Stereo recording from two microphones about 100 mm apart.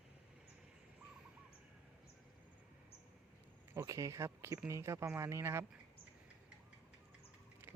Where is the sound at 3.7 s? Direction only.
35° right (ahead or behind).